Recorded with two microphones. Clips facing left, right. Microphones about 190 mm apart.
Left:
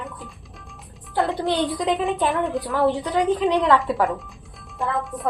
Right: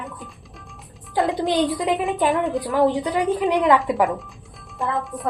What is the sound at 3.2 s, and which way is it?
Speech, centre (ahead or behind).